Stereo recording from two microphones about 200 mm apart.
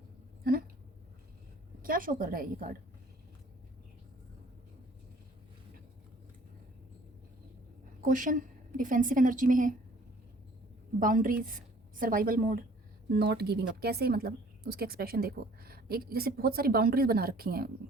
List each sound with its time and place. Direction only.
1.8 s speech: 45° right (ahead or behind)
8.0 s a woman's voice: 40° right (ahead or behind)
11.0 s a woman's voice: 45° right (ahead or behind)